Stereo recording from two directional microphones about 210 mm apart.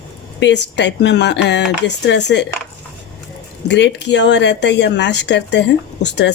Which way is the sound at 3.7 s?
55° left (ahead or behind).